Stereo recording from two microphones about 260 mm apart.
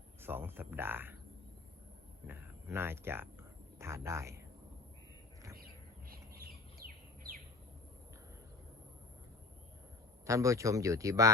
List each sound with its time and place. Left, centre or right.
0.2 s speech: centre
2.2 s speech: centre
6.1 s bird: right
10.2 s speech: centre